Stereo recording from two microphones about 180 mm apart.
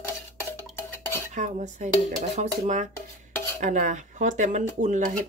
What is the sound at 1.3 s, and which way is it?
Dishes, 40° right (ahead or behind).